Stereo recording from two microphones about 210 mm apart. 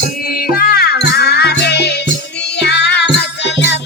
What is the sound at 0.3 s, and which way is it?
Music, 45° left (ahead or behind).